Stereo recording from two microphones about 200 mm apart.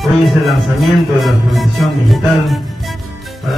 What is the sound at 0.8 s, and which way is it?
Speech, centre (ahead or behind).